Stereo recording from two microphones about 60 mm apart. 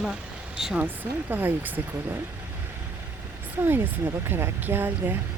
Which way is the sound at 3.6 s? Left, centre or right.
Right.